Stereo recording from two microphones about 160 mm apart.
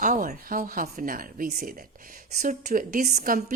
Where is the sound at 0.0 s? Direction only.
55° right (ahead or behind).